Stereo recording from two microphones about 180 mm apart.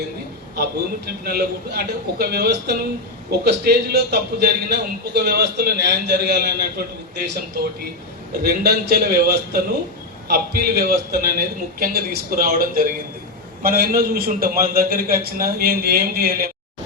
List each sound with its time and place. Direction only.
0.5 s a man's voice: 60° right (ahead or behind)